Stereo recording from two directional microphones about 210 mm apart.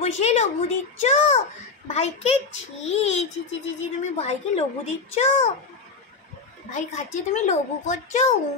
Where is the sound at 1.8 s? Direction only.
30° left (ahead or behind).